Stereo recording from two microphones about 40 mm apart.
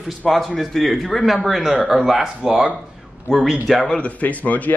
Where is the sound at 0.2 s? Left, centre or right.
Centre.